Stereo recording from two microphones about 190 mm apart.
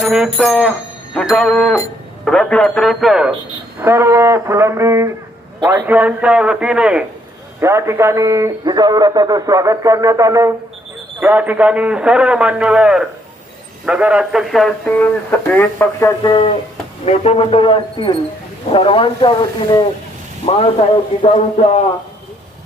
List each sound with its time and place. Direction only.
0.0 s a man's voice: centre (ahead or behind)
3.8 s a man's voice: 15° right (ahead or behind); by 16.5 s 20° left (ahead or behind)
17.1 s a man's voice: 35° left (ahead or behind)